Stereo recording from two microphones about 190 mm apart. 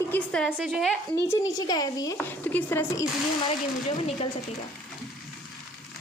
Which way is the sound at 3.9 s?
30° left (ahead or behind).